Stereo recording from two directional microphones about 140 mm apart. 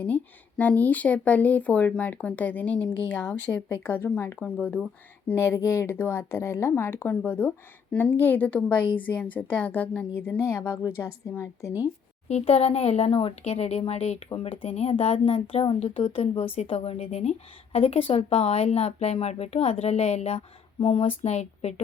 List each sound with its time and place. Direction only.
0.0 s speech: 10° left (ahead or behind)
5.3 s speech: 20° left (ahead or behind)
12.3 s speech: 45° left (ahead or behind)
21.2 s speech: 50° left (ahead or behind)